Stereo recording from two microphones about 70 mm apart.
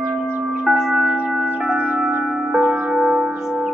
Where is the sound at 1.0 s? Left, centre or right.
Right.